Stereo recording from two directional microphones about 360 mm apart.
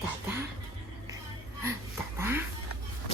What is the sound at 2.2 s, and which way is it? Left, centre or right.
Speech, centre.